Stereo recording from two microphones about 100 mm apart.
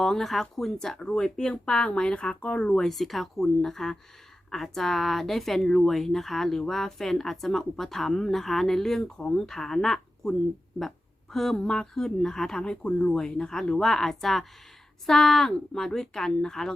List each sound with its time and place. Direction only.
0.0 s speech: 5° left (ahead or behind)